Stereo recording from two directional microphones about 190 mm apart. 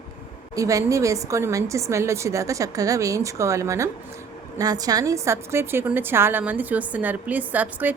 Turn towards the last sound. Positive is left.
turn(degrees=-10)  # may be behind; listen again after turning